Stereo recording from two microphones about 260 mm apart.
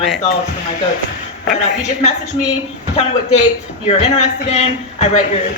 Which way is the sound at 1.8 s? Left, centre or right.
Left.